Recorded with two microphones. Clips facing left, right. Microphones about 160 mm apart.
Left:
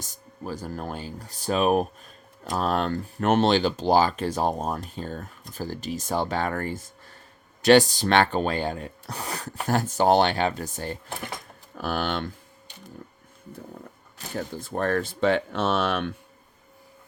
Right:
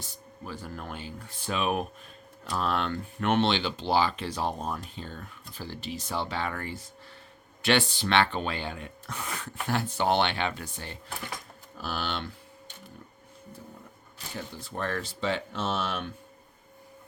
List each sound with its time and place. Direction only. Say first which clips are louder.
0.0 s speech: left 5 dB; 40° left (ahead or behind)
11.7 s speech: left 6 dB; 55° left (ahead or behind)
14.3 s speech: left 7 dB; 45° left (ahead or behind); by 16.0 s 65° left (ahead or behind)